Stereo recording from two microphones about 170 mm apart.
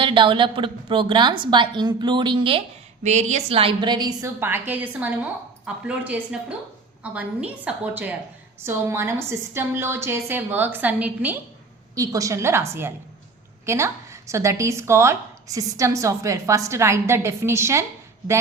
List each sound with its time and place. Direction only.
0.0 s a woman's voice: 30° right (ahead or behind)